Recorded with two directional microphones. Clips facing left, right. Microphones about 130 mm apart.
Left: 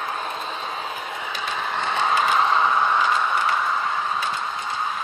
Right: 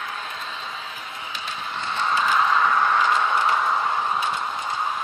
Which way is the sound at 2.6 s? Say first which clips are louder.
Even; 10° left (ahead or behind).